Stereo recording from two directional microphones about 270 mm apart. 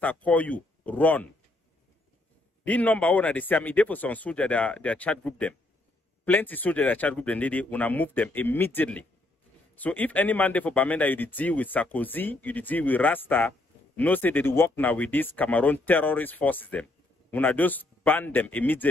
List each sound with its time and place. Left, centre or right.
0.0 s speech: centre
2.6 s speech: centre